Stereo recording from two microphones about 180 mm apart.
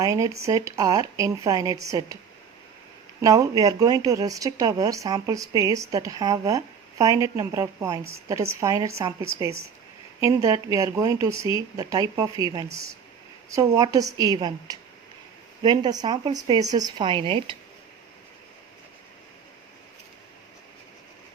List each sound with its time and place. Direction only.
0.0 s speech: 20° right (ahead or behind)
3.2 s a woman's voice: 20° right (ahead or behind)
11.3 s speech: 25° left (ahead or behind)
11.8 s speech: 20° right (ahead or behind)